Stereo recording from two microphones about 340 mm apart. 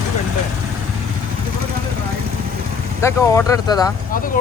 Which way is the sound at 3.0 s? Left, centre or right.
Centre.